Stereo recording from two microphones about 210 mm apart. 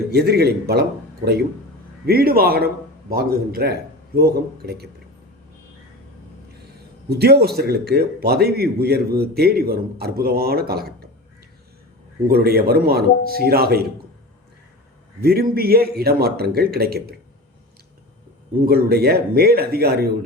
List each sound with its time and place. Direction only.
0.1 s a man's voice: 50° right (ahead or behind)
7.1 s a man's voice: 50° right (ahead or behind)
12.3 s a man's voice: 45° right (ahead or behind)
15.2 s a man's voice: 45° right (ahead or behind)
18.6 s a man's voice: 45° right (ahead or behind)